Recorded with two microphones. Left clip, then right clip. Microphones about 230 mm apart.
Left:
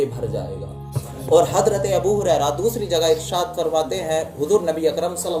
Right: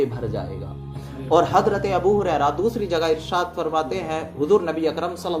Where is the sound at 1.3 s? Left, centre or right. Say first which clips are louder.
Left 2 dB; centre.